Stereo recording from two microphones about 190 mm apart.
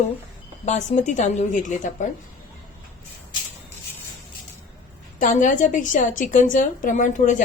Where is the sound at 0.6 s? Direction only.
40° left (ahead or behind).